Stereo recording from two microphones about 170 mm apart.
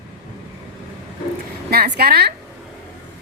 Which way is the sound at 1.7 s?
65° right (ahead or behind).